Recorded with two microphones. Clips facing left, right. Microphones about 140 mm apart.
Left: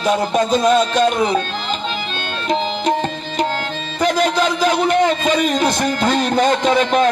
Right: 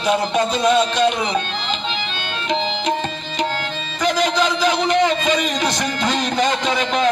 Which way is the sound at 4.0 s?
50° left (ahead or behind).